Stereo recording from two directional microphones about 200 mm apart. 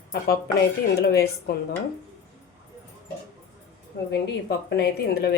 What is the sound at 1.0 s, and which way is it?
Cutlery, 50° left (ahead or behind).